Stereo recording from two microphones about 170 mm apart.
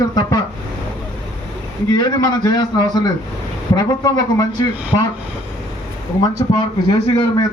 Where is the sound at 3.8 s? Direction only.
25° left (ahead or behind).